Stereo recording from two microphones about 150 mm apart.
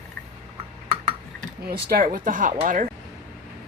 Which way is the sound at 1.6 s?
75° right (ahead or behind).